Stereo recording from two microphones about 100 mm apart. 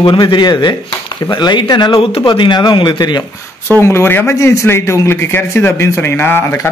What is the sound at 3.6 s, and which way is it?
A man's voice, 25° left (ahead or behind).